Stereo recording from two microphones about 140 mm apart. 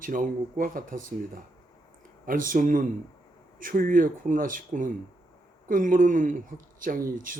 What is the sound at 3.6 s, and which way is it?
Speech, 85° right.